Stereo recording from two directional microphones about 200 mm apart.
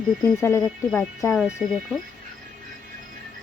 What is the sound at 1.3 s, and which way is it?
Speech, centre (ahead or behind).